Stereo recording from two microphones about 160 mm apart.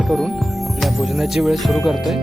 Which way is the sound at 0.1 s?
Centre (ahead or behind).